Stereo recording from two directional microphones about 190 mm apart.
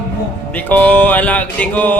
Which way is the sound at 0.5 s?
10° left (ahead or behind).